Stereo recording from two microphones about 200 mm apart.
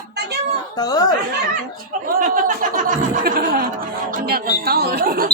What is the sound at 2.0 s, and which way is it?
Speech, 45° right (ahead or behind).